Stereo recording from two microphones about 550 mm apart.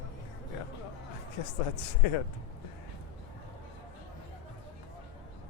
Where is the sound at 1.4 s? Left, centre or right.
Left.